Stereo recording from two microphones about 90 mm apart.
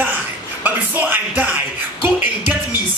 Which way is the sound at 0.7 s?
20° right (ahead or behind).